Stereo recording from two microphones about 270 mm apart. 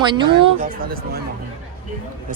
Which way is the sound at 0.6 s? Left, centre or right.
Right.